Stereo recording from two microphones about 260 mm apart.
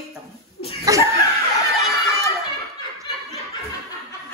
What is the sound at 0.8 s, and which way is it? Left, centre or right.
Speech, centre.